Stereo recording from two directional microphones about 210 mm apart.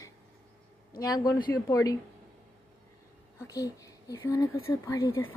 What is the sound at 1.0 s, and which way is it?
Speech, 15° left (ahead or behind).